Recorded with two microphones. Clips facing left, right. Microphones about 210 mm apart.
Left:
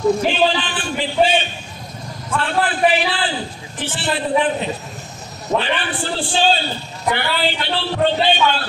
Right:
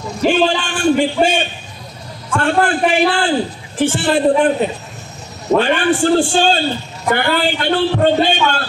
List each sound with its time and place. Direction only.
0.3 s a man's voice: 45° right (ahead or behind)